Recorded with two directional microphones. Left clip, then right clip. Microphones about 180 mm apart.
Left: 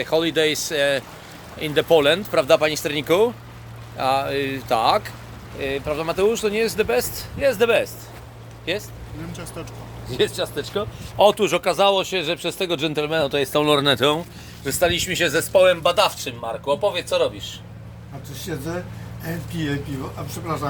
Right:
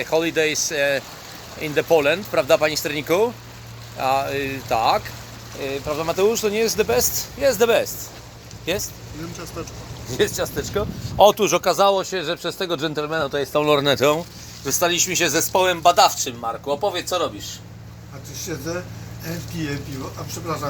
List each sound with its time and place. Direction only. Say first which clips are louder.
0.0 s speech: even; 15° left (ahead or behind)
2.3 s speech: right 2 dB; 10° left (ahead or behind)
5.5 s speech: left 1 dB; centre (ahead or behind); by 7.9 s 20° right (ahead or behind)
8.7 s speech: right 1 dB; 35° right (ahead or behind)
10.1 s speech: even; 30° right (ahead or behind)
11.2 s speech: right 2 dB; 10° right (ahead or behind); by 13.7 s 15° left (ahead or behind)
13.7 s speech: right 2 dB; 5° right (ahead or behind); by 16.9 s 20° right (ahead or behind)
18.4 s speech: right 1 dB; 25° left (ahead or behind)